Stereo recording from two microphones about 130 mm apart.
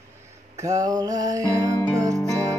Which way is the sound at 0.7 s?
30° right (ahead or behind).